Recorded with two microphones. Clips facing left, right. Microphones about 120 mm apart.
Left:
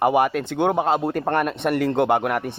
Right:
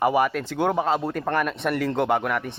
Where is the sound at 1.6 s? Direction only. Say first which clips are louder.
Left 5 dB; centre (ahead or behind).